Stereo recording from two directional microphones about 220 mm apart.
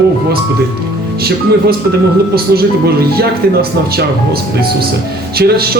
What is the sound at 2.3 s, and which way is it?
Speech, 45° right (ahead or behind).